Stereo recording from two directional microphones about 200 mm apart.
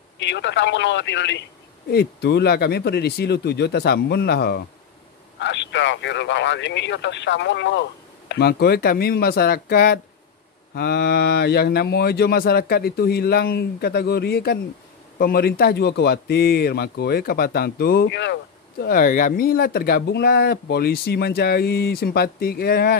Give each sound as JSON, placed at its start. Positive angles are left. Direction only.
{"t": 0.2, "sound": "a man's voice", "side_deg": 60}